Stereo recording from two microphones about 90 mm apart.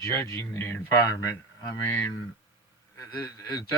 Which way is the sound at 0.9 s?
35° left (ahead or behind).